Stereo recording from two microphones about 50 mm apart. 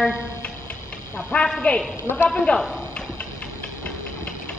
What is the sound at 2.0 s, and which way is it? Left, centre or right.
Speech, left.